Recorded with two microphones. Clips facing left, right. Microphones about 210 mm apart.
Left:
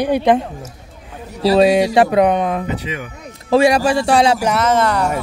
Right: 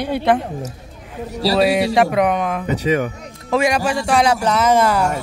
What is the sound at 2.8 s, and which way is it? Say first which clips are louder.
Speech: right 9 dB; 45° right (ahead or behind).